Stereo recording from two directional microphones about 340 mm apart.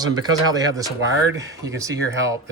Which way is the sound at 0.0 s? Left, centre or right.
Centre.